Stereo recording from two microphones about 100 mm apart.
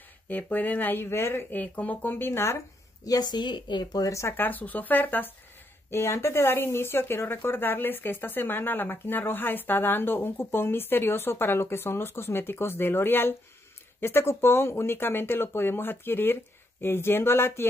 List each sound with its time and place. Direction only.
0.3 s speech: 15° left (ahead or behind)
3.1 s speech: 45° left (ahead or behind); by 17.6 s 25° left (ahead or behind)